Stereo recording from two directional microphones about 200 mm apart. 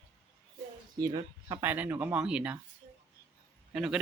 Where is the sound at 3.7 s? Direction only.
5° right (ahead or behind).